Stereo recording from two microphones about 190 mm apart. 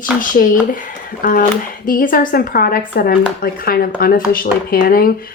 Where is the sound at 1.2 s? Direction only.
45° left (ahead or behind).